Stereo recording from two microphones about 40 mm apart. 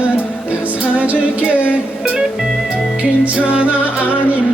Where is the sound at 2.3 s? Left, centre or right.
Centre.